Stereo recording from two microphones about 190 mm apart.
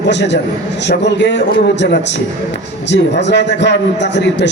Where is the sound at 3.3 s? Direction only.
65° left (ahead or behind).